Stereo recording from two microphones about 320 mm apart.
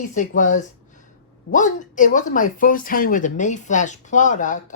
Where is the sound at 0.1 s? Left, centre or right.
Left.